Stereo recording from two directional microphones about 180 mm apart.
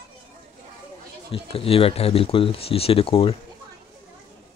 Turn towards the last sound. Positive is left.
turn(degrees=30)  # may be behind; listen again after turning